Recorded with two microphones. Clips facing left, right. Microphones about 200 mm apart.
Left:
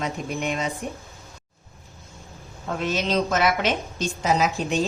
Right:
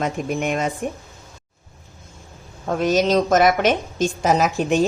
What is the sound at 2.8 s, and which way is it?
A woman's voice, 40° right (ahead or behind).